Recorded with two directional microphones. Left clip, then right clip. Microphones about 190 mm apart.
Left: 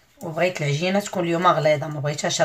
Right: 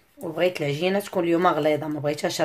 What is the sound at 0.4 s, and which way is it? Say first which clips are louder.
Speech: left 1 dB; 40° right (ahead or behind).